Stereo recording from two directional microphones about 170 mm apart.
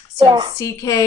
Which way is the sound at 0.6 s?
20° left (ahead or behind).